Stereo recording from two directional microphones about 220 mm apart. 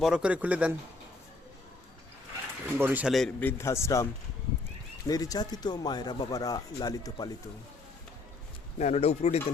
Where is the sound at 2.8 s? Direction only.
5° right (ahead or behind); by 4.1 s 15° left (ahead or behind).